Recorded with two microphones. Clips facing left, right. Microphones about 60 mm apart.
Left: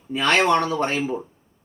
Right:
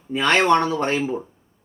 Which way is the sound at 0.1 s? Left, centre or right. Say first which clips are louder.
Right 1 dB; centre.